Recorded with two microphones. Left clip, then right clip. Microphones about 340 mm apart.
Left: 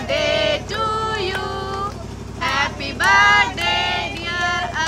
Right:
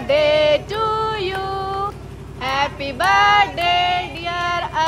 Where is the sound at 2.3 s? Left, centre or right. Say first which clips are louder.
Even; centre.